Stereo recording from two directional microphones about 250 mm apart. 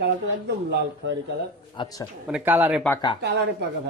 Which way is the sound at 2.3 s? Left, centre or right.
Centre.